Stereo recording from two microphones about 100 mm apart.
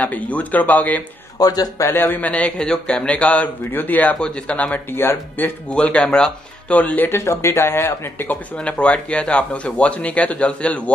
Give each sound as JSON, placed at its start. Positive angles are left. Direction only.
{"t": 0.0, "sound": "speech", "side_deg": 15}
{"t": 1.4, "sound": "a man's voice", "side_deg": 40}
{"t": 1.9, "sound": "speech", "side_deg": 20}
{"t": 8.5, "sound": "speech", "side_deg": 10}